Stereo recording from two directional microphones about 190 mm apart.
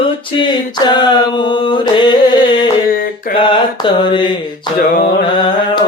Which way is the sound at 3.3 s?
25° left (ahead or behind).